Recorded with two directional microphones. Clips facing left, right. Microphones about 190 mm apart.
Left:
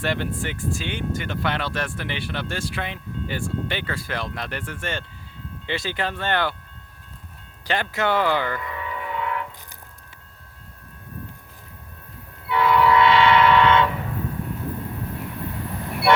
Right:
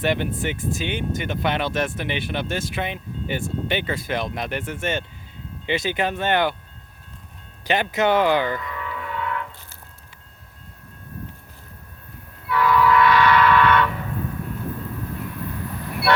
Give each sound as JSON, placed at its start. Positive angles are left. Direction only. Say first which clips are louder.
{"t": 0.0, "sound": "speech", "louder": "right 3 dB", "side_deg": -20}
{"t": 7.7, "sound": "speech", "louder": "right 3 dB", "side_deg": -20}
{"t": 8.7, "sound": "music", "louder": "left 1 dB", "side_deg": 15}
{"t": 12.5, "sound": "train", "louder": "even", "side_deg": 25}